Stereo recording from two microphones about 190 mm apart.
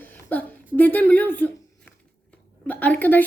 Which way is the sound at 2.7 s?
10° left (ahead or behind).